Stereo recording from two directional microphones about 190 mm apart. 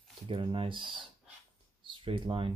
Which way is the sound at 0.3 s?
30° right (ahead or behind).